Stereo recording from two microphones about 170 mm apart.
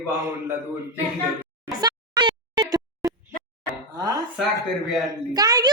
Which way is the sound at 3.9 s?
25° right (ahead or behind).